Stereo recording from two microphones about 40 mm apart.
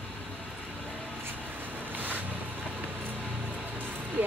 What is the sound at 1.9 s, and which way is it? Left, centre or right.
Vehicle, right.